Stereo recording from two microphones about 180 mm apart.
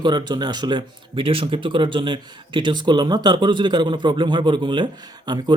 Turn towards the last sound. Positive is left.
turn(degrees=-25)  # may be behind; listen again after turning